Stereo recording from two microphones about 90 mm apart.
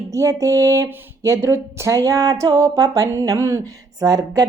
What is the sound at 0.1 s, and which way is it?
Speech, 35° right (ahead or behind).